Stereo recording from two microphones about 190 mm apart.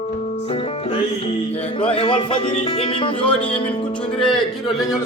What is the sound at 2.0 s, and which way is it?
Speech, 25° left (ahead or behind).